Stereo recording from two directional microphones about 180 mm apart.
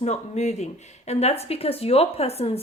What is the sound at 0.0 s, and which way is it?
A woman's voice, 40° left (ahead or behind).